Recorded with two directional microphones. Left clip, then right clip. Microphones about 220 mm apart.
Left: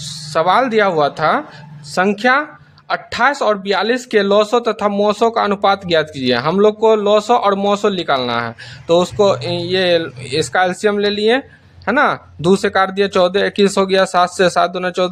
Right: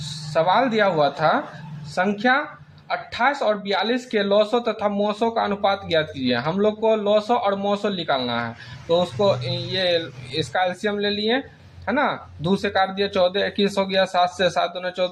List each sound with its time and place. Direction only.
0.3 s speech: 40° left (ahead or behind)